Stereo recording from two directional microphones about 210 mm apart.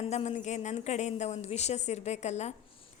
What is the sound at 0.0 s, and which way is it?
A woman's voice, 30° left (ahead or behind).